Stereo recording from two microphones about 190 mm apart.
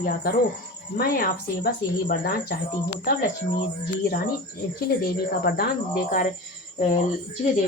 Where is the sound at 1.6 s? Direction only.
55° left (ahead or behind).